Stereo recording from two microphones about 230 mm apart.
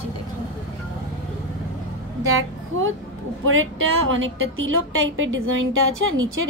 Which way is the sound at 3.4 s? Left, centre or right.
Right.